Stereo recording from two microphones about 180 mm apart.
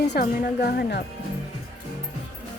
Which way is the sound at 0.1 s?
60° left (ahead or behind).